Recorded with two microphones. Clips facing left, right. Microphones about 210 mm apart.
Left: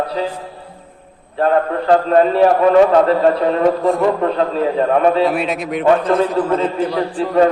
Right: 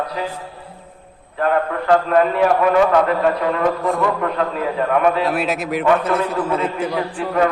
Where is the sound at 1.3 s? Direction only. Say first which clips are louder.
Left 3 dB; 30° left (ahead or behind).